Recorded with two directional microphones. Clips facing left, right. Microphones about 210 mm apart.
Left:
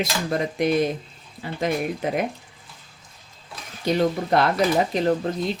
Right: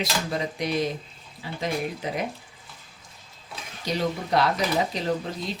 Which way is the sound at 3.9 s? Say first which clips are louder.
Left 6 dB; 55° left (ahead or behind).